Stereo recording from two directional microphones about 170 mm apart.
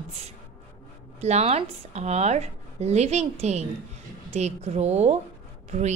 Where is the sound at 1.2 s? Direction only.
40° right (ahead or behind).